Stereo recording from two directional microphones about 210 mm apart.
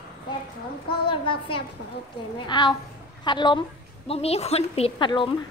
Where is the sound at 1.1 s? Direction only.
25° left (ahead or behind).